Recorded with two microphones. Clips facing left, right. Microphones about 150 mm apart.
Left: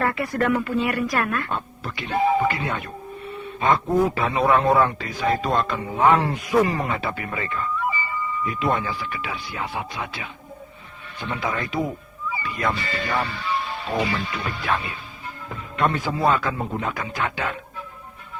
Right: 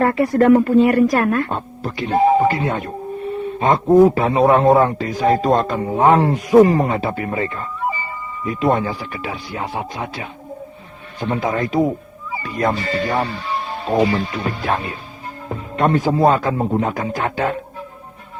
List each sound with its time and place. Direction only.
0.0 s a man's voice: 35° right (ahead or behind)